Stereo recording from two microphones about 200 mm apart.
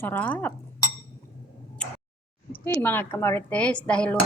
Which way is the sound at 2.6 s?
10° left (ahead or behind).